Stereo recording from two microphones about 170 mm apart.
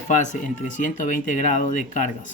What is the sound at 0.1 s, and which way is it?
Speech, 45° left (ahead or behind).